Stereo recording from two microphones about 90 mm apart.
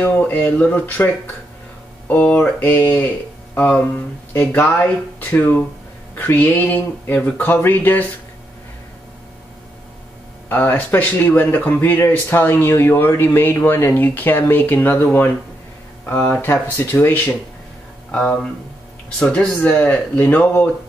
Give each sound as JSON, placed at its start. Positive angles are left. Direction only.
{"t": 0.0, "sound": "speech", "side_deg": 15}
{"t": 10.5, "sound": "speech", "side_deg": 20}
{"t": 18.1, "sound": "speech", "side_deg": 10}